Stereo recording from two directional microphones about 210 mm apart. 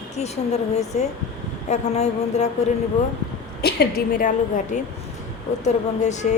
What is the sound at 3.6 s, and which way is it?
A woman's voice, 45° left (ahead or behind).